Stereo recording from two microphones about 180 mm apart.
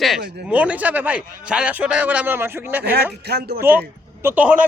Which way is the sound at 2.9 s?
60° right (ahead or behind).